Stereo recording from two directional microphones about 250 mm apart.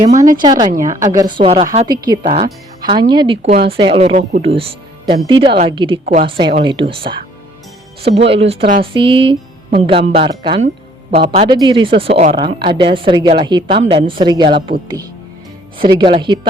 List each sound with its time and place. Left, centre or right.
0.7 s a woman's voice: right
1.0 s speech: centre